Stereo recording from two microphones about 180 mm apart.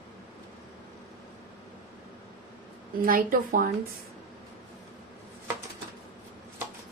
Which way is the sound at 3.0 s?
50° right (ahead or behind).